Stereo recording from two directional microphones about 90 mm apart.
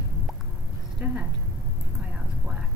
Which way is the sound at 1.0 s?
15° right (ahead or behind).